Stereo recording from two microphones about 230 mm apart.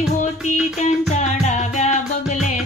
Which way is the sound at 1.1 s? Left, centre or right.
Left.